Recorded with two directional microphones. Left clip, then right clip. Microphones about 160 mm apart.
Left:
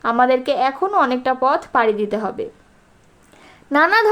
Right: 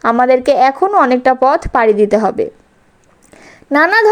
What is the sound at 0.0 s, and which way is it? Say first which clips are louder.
Speech: right 5 dB; 45° right (ahead or behind).